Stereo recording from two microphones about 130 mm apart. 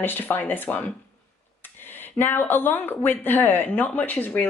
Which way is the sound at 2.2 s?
15° left (ahead or behind).